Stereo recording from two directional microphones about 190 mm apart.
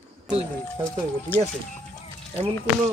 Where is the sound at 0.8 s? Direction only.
10° left (ahead or behind).